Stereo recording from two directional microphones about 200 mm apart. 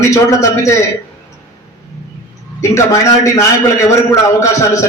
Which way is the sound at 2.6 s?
15° left (ahead or behind).